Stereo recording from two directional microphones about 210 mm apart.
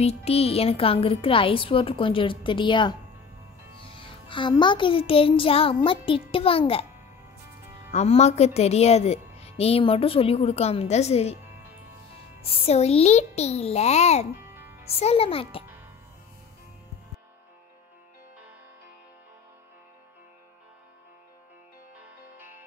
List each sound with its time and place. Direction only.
0.0 s a woman's voice: 30° left (ahead or behind)
7.9 s a woman's voice: 30° left (ahead or behind)
12.4 s a child's voice: 25° left (ahead or behind)
14.4 s music: 10° right (ahead or behind)
14.9 s a woman's voice: 30° left (ahead or behind)